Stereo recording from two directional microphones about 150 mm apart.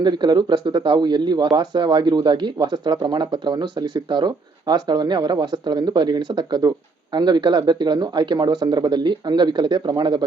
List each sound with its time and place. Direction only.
0.0 s speech: 30° right (ahead or behind)